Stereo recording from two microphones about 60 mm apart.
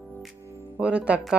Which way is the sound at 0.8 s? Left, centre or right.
Centre.